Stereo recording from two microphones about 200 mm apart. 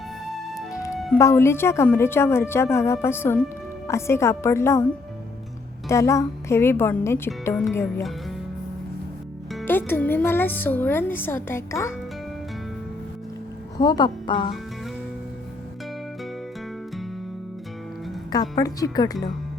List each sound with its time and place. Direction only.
0.7 s music: 15° left (ahead or behind)
1.2 s a woman's voice: 15° left (ahead or behind)
5.9 s a woman's voice: 15° left (ahead or behind)
9.6 s a woman's voice: 10° left (ahead or behind)
13.7 s speech: 20° left (ahead or behind)
18.3 s a woman's voice: 20° left (ahead or behind)